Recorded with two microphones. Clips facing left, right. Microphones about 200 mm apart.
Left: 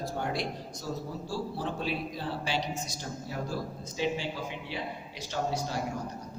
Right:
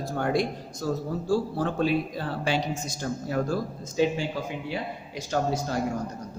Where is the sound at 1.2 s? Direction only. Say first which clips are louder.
Right 9 dB; 50° right (ahead or behind).